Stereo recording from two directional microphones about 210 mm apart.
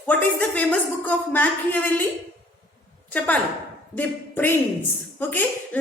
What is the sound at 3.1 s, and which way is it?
A woman's voice, 5° left (ahead or behind).